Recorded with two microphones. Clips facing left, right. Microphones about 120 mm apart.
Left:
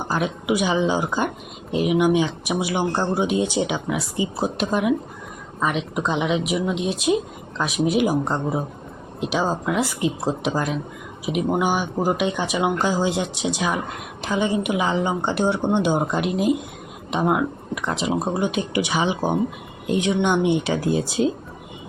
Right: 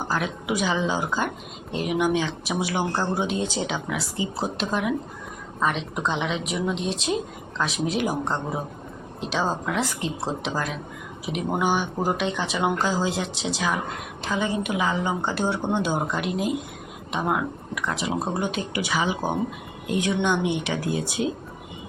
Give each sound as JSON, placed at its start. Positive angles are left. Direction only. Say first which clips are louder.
{"t": 0.1, "sound": "a woman's voice", "louder": "left 5 dB", "side_deg": 15}